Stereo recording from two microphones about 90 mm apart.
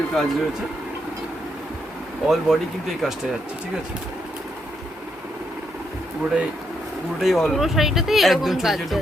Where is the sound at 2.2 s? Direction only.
Centre (ahead or behind).